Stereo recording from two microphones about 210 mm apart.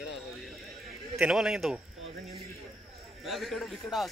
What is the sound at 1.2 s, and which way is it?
Speech, 5° right (ahead or behind).